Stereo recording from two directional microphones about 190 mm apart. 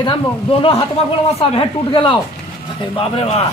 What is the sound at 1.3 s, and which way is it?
Speech, 30° left (ahead or behind).